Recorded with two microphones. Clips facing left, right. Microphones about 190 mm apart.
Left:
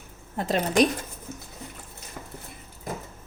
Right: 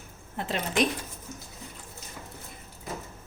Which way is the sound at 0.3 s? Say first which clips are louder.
Left 6 dB; 40° left (ahead or behind).